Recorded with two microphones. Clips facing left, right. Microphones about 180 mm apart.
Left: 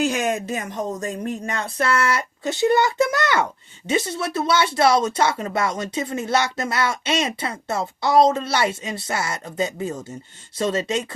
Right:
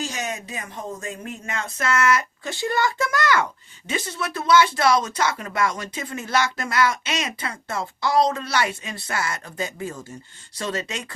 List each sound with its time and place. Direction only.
0.0 s speech: 55° left (ahead or behind); by 11.0 s 25° left (ahead or behind)